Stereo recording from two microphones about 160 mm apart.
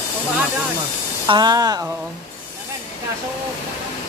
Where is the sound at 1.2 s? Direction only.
30° right (ahead or behind).